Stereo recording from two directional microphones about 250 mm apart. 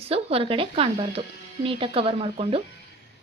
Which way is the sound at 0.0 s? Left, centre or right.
Right.